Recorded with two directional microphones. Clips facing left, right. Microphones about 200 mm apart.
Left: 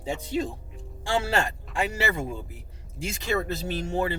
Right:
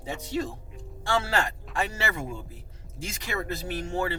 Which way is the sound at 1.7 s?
20° left (ahead or behind).